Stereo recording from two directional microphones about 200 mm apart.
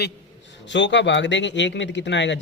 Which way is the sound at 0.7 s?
60° left (ahead or behind).